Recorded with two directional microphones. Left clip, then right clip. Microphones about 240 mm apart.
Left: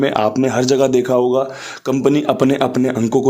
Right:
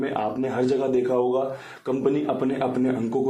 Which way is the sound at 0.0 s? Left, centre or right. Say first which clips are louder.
Left 10 dB; left.